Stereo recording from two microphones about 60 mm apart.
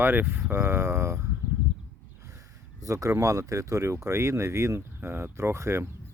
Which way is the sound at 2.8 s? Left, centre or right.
Right.